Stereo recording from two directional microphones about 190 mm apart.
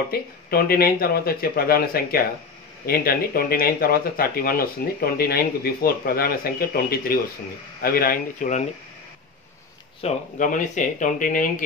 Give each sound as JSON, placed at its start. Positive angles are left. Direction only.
{"t": 0.1, "sound": "speech", "side_deg": 50}
{"t": 10.0, "sound": "speech", "side_deg": 40}